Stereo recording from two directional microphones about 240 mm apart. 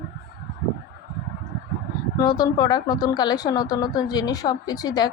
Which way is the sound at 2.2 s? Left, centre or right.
Centre.